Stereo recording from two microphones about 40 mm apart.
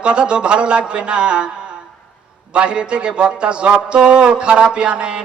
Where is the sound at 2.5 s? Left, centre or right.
Right.